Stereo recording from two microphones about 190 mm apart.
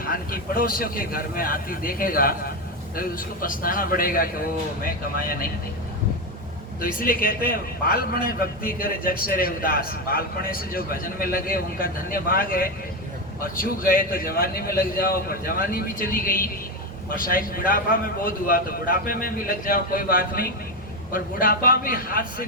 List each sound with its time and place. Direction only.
0.0 s a man's voice: 50° left (ahead or behind)
6.8 s a man's voice: 45° left (ahead or behind)